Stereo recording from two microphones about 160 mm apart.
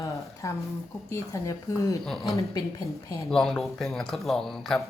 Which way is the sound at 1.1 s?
20° left (ahead or behind).